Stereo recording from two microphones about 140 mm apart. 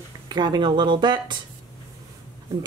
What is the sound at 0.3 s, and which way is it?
Speech, 30° right (ahead or behind).